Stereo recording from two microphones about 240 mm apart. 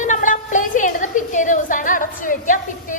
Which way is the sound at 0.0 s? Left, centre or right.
Left.